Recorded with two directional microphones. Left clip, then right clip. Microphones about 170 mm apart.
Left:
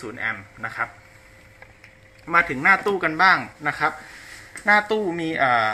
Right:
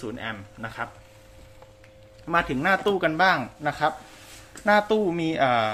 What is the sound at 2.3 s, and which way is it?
Speech, 30° right (ahead or behind).